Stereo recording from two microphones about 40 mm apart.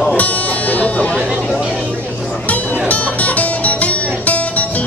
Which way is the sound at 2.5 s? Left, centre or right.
Left.